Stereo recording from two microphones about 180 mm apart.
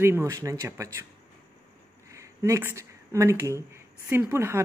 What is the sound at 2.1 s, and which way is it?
Speech, 15° right (ahead or behind).